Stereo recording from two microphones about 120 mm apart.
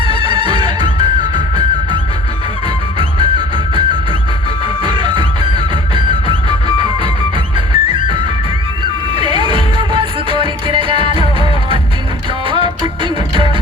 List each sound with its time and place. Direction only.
0.0 s music: 45° right (ahead or behind)
3.0 s music: 45° right (ahead or behind)